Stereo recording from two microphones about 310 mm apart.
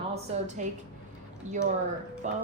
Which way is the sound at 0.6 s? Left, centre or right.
Right.